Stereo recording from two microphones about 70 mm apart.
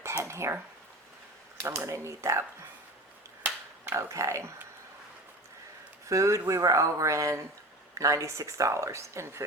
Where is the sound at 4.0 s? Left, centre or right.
Right.